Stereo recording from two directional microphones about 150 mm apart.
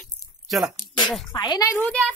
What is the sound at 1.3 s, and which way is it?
Speech, 25° left (ahead or behind).